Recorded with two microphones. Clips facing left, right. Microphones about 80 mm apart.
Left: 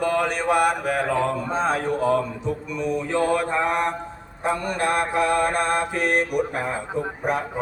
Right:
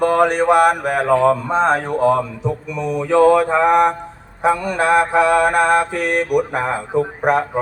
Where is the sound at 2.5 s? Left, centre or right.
Right.